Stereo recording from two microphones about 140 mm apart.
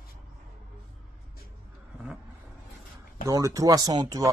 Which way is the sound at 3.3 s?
25° right (ahead or behind).